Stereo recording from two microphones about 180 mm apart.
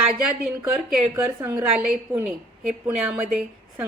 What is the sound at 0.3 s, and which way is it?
Speech, 5° right (ahead or behind).